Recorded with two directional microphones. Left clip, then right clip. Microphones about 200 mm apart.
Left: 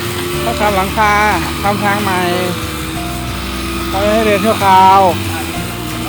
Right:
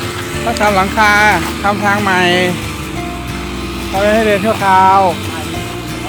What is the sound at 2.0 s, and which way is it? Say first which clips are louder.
Speech: right 3 dB; 35° right (ahead or behind).